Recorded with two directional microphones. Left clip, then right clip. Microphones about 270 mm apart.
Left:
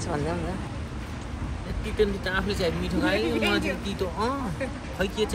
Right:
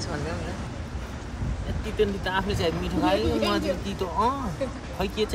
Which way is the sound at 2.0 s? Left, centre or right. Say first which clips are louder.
Even; right.